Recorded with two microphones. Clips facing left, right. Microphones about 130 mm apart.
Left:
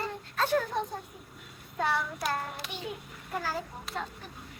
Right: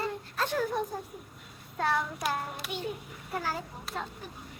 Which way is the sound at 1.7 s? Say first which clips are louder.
Right 1 dB; centre (ahead or behind).